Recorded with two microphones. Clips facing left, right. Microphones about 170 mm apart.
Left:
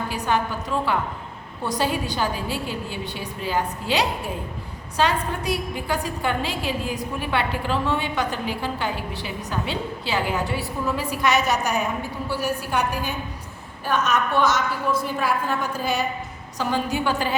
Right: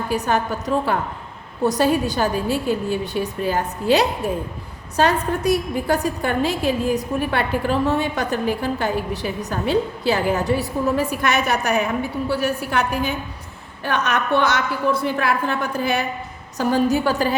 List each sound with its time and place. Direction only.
0.1 s a woman's voice: 45° right (ahead or behind); by 11.9 s 60° right (ahead or behind)
13.8 s a woman's voice: 65° right (ahead or behind)
16.6 s a woman's voice: 40° right (ahead or behind)